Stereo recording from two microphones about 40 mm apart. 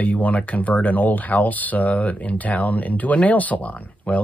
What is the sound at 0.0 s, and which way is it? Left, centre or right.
Speech, left.